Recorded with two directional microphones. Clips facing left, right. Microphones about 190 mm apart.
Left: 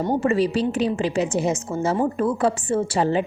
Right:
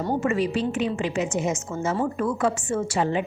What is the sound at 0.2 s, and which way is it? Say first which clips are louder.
A woman's voice: left 3 dB; 35° left (ahead or behind).